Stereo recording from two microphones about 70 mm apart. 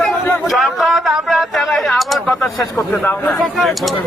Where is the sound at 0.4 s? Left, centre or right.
Centre.